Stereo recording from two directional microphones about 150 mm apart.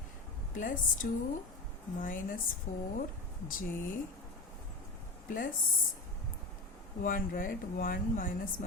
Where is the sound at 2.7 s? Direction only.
70° left (ahead or behind).